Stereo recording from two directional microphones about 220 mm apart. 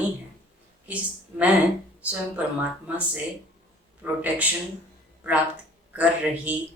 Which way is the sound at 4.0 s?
5° right (ahead or behind).